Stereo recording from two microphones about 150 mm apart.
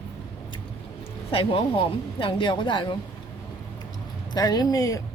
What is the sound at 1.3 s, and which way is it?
Speech, 35° left (ahead or behind).